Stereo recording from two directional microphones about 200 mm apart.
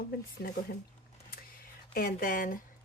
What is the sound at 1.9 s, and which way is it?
Speech, 45° left (ahead or behind).